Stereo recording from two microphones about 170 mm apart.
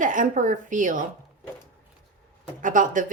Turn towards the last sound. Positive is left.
turn(degrees=-50)  # may be behind; listen again after turning